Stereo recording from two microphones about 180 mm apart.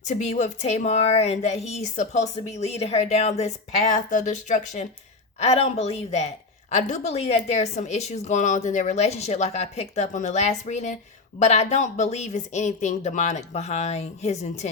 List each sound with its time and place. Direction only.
0.1 s a woman's voice: 40° left (ahead or behind)